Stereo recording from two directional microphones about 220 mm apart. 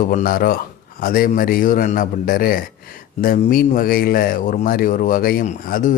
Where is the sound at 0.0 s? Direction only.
40° left (ahead or behind).